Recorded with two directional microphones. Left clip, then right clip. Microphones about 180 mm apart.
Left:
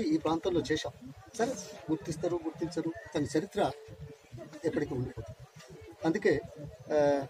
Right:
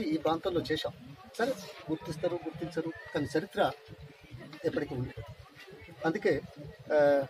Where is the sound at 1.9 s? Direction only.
5° right (ahead or behind).